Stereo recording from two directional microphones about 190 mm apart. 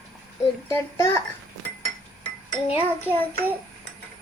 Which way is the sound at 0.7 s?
15° left (ahead or behind).